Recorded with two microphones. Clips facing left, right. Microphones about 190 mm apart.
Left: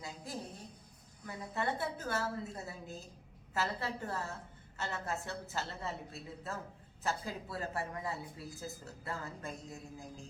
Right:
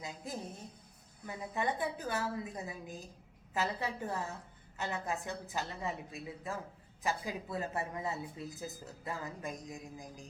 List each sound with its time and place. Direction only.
1.3 s speech: 15° right (ahead or behind)